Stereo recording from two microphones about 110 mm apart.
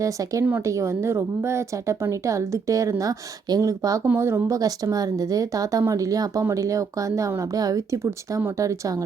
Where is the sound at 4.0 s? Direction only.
20° right (ahead or behind).